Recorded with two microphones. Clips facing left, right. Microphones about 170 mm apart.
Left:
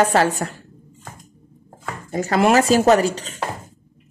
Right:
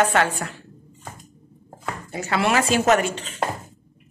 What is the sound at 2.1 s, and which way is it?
A woman's voice, 40° left (ahead or behind).